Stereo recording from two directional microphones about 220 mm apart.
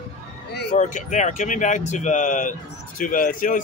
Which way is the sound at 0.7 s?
35° left (ahead or behind).